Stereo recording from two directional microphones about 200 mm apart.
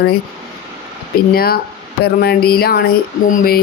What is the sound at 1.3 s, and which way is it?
Speech, 50° left (ahead or behind).